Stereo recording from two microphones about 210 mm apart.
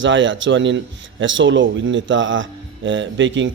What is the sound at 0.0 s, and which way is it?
Speech, 60° right (ahead or behind).